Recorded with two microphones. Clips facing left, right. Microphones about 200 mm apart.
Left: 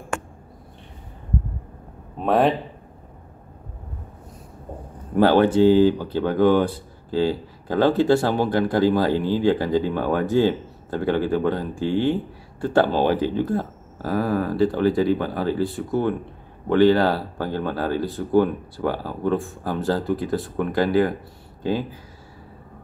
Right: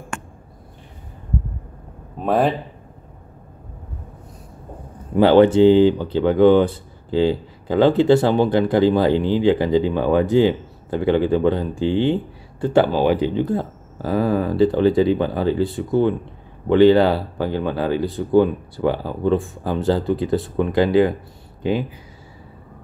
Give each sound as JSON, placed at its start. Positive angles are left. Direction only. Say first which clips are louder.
{"t": 2.1, "sound": "speech", "louder": "even", "side_deg": 0}
{"t": 5.2, "sound": "speech", "louder": "right 4 dB", "side_deg": -20}